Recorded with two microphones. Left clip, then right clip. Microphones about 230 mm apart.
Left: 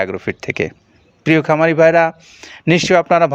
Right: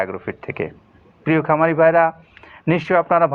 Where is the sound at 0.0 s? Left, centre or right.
Left.